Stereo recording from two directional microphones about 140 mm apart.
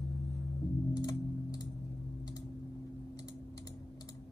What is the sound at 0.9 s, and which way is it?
Music, 30° left (ahead or behind).